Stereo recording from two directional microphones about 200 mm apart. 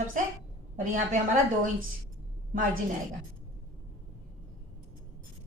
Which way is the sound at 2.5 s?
45° right (ahead or behind).